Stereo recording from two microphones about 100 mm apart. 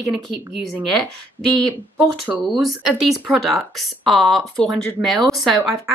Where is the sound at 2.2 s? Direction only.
15° right (ahead or behind).